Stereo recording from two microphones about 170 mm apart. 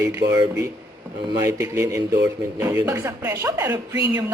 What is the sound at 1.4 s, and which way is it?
Speech, 20° right (ahead or behind).